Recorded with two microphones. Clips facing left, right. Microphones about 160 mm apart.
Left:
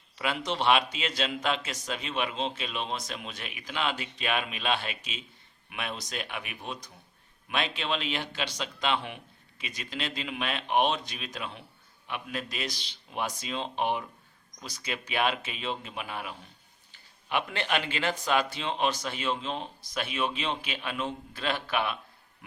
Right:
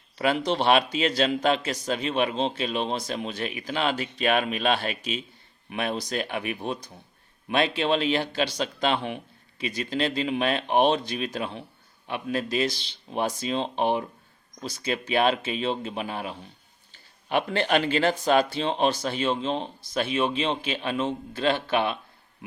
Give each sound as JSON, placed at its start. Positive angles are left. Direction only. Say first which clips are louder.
{"t": 0.2, "sound": "a man's voice", "louder": "right 6 dB", "side_deg": -35}